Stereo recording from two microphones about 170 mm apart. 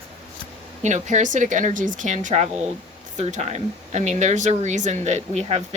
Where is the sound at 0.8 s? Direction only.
45° right (ahead or behind).